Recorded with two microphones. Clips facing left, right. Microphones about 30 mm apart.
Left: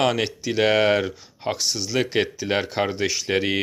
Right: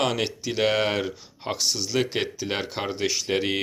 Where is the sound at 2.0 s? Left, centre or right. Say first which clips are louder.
Left 4 dB; centre.